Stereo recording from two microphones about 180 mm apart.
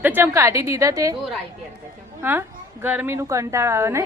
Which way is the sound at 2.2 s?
10° right (ahead or behind).